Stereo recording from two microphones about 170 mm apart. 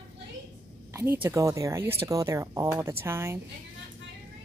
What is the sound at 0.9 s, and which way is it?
Speech, 15° right (ahead or behind).